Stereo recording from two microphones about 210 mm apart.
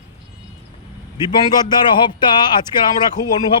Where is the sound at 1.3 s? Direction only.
20° left (ahead or behind).